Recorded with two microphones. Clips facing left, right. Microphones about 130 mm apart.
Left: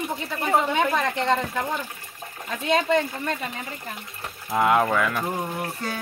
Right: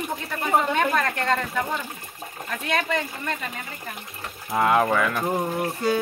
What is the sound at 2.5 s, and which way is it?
Speech, 25° left (ahead or behind).